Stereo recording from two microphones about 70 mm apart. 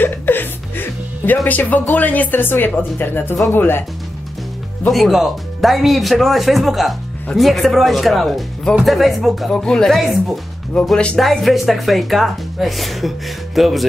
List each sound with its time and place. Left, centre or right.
0.0 s music: left
1.5 s speech: left
4.8 s speech: centre
9.5 s speech: centre